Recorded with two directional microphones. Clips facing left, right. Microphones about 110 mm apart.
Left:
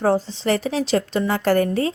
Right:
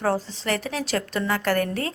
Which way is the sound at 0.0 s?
25° left (ahead or behind).